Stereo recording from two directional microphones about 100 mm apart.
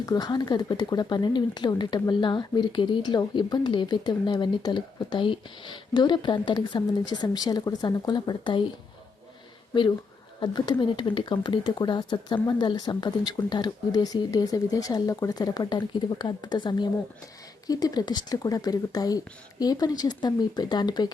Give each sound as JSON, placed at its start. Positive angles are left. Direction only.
{"t": 0.0, "sound": "speech", "side_deg": 40}
{"t": 10.4, "sound": "speech", "side_deg": 45}